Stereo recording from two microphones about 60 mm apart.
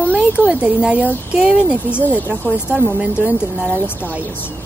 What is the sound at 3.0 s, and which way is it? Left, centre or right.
Speech, centre.